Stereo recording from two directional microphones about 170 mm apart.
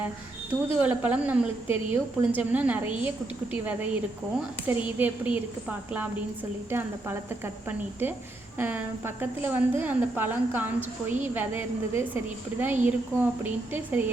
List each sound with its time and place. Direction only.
0.8 s a woman's voice: 10° right (ahead or behind)